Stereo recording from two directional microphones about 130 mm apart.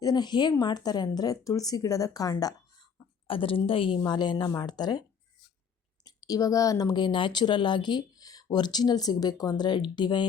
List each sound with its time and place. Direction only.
0.0 s speech: 30° left (ahead or behind)
3.2 s a woman's voice: 45° left (ahead or behind)
4.0 s speech: 35° left (ahead or behind)
6.1 s speech: 30° left (ahead or behind)